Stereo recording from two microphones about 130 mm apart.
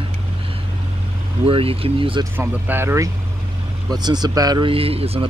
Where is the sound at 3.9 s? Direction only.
30° right (ahead or behind).